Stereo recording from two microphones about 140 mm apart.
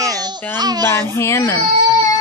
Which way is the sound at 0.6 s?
30° right (ahead or behind).